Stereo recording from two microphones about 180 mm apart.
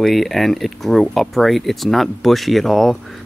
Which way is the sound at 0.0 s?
Centre (ahead or behind).